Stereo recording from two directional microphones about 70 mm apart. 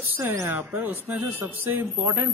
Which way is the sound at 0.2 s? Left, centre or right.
Right.